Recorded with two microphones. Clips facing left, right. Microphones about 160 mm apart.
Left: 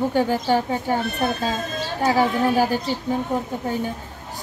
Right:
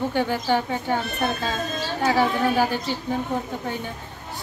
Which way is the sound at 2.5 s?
40° left (ahead or behind).